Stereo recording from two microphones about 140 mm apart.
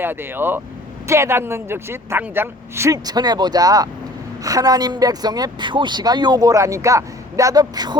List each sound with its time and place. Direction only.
0.0 s speech: 15° right (ahead or behind)